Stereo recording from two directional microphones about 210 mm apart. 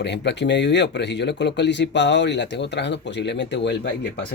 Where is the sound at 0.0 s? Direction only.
55° left (ahead or behind).